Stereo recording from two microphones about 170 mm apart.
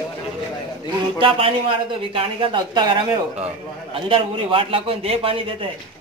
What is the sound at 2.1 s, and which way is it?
A man's voice, 25° right (ahead or behind).